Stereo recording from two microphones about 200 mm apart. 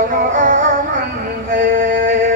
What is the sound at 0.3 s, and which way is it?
Music, 35° right (ahead or behind).